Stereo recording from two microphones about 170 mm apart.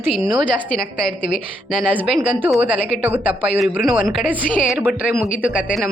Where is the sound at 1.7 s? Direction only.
10° right (ahead or behind).